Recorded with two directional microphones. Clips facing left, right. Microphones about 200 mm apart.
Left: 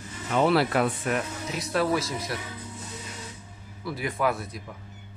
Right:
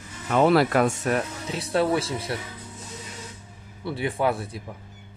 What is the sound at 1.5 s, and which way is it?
Speech, 30° right (ahead or behind).